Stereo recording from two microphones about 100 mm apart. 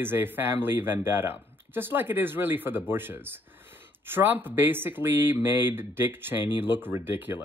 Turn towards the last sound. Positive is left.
turn(degrees=-20)  # may be behind; listen again after turning